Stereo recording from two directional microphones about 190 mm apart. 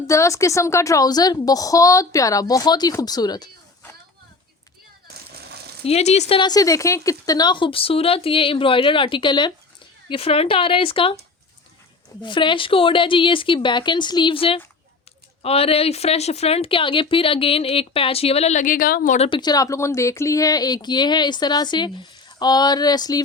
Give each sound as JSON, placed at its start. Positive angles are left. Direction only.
{"t": 0.1, "sound": "a woman's voice", "side_deg": 15}
{"t": 5.1, "sound": "a sound", "side_deg": -55}
{"t": 5.8, "sound": "a woman's voice", "side_deg": 35}
{"t": 12.2, "sound": "a woman's voice", "side_deg": 25}